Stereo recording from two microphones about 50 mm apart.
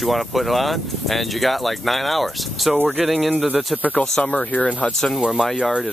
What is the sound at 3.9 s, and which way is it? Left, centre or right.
Speech, left.